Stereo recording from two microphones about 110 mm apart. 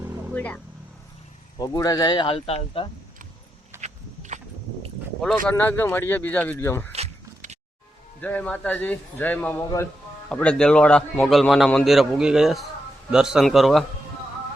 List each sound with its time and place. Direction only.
0.0 s vehicle: 25° right (ahead or behind)
0.3 s speech: 15° left (ahead or behind)
1.5 s speech: 35° left (ahead or behind)
2.3 s speech: 60° left (ahead or behind)
3.8 s walk: 90° right
5.3 s speech: 15° left (ahead or behind)
6.9 s a sound: 75° right (ahead or behind)
8.2 s a man's voice: 15° left (ahead or behind)